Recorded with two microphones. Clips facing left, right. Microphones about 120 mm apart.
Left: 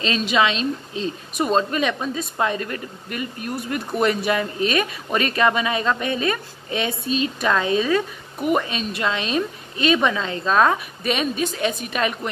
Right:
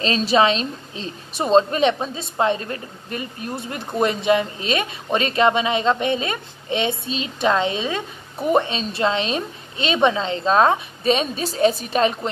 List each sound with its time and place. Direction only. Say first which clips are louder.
0.0 s a woman's voice: right 3 dB; 35° right (ahead or behind)